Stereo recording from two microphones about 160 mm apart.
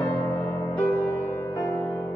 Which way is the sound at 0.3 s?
15° left (ahead or behind).